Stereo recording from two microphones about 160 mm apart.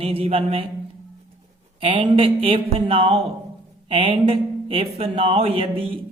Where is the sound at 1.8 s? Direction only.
35° right (ahead or behind).